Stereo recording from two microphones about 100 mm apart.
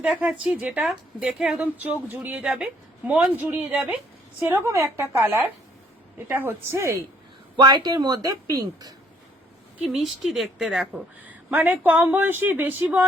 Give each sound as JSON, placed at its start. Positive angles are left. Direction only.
{"t": 0.0, "sound": "a woman's voice", "side_deg": -10}
{"t": 7.5, "sound": "a woman's voice", "side_deg": -50}
{"t": 9.8, "sound": "a woman's voice", "side_deg": -5}